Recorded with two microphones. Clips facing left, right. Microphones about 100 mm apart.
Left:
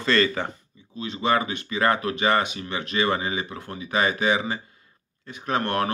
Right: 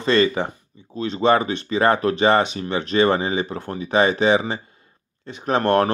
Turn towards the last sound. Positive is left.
turn(degrees=-30)  # may be behind; listen again after turning